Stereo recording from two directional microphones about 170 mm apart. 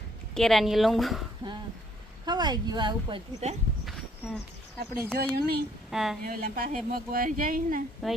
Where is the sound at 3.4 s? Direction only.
40° right (ahead or behind).